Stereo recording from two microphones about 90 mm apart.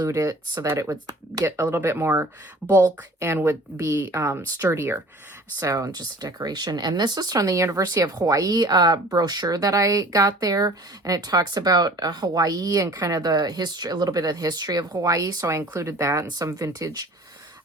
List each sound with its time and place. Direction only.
0.0 s speech: 35° right (ahead or behind)
1.7 s speech: 30° right (ahead or behind)
5.5 s speech: 35° right (ahead or behind)